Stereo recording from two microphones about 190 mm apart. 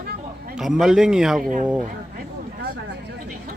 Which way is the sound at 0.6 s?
Centre (ahead or behind).